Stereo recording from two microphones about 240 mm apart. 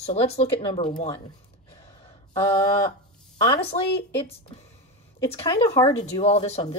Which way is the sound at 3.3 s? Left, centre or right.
Centre.